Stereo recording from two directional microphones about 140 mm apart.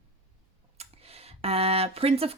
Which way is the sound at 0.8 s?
45° right (ahead or behind).